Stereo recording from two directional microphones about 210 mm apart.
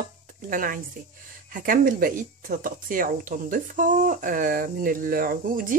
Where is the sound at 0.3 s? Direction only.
40° right (ahead or behind).